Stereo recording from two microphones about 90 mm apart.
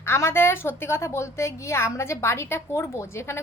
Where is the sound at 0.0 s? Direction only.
30° left (ahead or behind).